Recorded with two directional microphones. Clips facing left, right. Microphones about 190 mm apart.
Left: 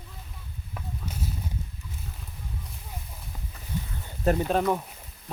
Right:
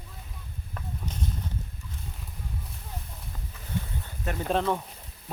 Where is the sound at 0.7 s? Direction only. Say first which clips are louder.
Even; 5° left (ahead or behind).